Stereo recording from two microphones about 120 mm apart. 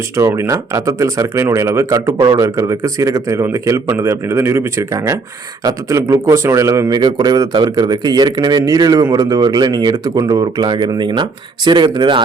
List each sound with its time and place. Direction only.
0.2 s speech: 25° right (ahead or behind)
2.1 s speech: 35° right (ahead or behind)